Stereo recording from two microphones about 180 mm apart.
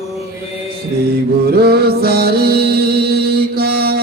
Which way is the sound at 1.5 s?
60° right (ahead or behind).